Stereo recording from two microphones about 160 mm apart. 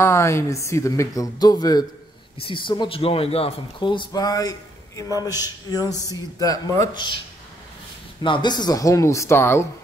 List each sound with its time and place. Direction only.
0.0 s a woman's voice: 15° left (ahead or behind)
8.2 s speech: 30° left (ahead or behind)